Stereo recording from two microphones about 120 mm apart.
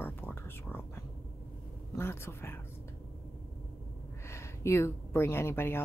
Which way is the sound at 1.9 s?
20° left (ahead or behind).